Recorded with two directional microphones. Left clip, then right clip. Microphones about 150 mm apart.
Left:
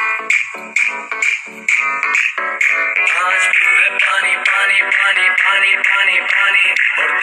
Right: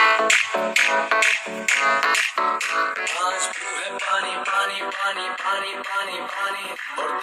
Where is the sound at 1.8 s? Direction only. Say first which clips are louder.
Left 3 dB; 60° right (ahead or behind).